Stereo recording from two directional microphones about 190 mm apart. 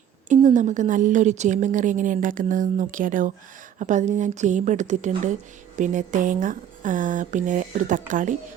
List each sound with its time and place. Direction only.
0.3 s speech: 40° right (ahead or behind)